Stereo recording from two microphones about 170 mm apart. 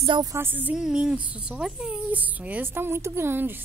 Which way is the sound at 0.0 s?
25° right (ahead or behind).